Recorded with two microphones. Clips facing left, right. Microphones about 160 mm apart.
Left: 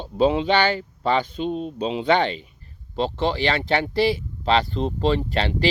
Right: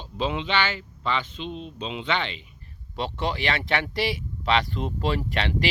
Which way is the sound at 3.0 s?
30° left (ahead or behind).